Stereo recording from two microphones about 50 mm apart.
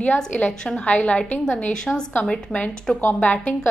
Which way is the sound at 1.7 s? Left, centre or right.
Centre.